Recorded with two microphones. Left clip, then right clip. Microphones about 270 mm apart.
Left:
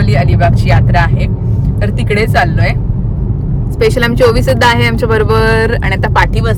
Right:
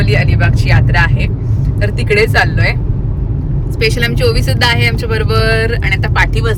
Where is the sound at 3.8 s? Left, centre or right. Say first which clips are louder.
Left 5 dB; left.